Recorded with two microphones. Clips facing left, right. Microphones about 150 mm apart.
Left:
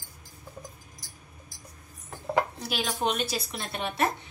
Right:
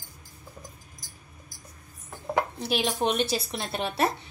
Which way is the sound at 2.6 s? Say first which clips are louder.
Right 3 dB; 25° right (ahead or behind).